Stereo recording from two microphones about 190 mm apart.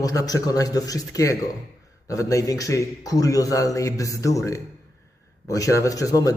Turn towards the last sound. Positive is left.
turn(degrees=20)  # may be behind; listen again after turning